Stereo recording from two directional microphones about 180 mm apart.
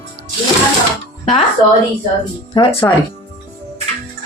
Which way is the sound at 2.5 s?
30° left (ahead or behind).